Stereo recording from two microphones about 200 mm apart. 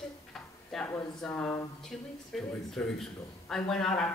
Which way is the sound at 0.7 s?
Centre (ahead or behind).